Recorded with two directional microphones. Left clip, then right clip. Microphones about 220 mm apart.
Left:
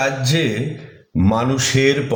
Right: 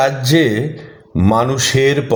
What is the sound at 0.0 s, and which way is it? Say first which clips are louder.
A man's voice: right 6 dB; 35° right (ahead or behind).